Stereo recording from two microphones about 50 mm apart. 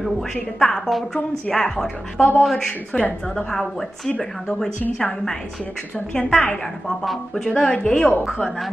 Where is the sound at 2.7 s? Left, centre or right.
Left.